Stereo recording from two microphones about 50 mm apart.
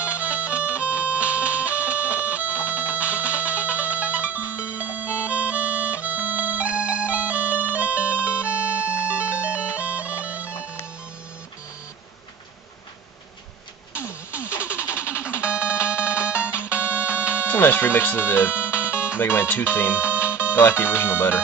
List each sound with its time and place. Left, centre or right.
0.0 s music: right
9.0 s bagpipes: right
14.4 s vehicle: right
15.0 s music: left
15.4 s music: right
16.6 s music: left
18.0 s speech: left